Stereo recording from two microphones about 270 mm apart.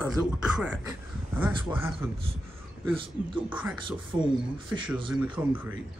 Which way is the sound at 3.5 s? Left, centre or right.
Centre.